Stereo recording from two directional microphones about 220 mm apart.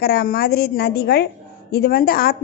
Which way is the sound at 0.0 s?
45° left (ahead or behind).